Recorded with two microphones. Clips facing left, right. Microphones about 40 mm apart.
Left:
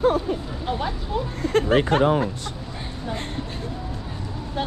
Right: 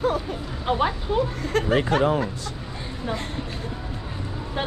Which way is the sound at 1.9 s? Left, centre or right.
Left.